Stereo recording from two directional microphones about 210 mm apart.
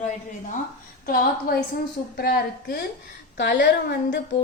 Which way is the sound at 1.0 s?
45° left (ahead or behind).